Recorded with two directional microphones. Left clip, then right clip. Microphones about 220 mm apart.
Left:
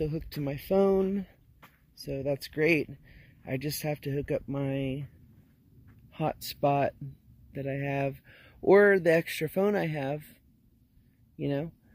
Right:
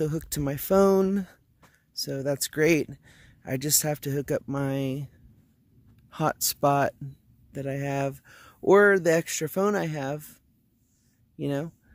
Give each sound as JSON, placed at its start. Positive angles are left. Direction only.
{"t": 0.0, "sound": "speech", "side_deg": -30}
{"t": 6.0, "sound": "speech", "side_deg": -25}